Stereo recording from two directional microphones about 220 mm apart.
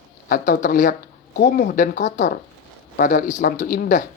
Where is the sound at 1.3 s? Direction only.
50° left (ahead or behind).